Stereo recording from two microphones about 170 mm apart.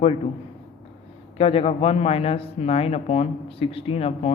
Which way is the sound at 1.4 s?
35° left (ahead or behind).